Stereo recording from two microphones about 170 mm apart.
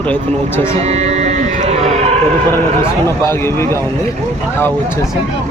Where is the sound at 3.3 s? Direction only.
15° left (ahead or behind).